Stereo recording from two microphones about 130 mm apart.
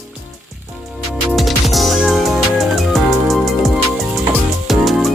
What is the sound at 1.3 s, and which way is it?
Music, centre (ahead or behind).